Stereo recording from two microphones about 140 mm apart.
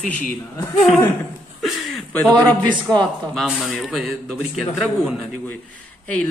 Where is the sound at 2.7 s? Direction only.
30° right (ahead or behind).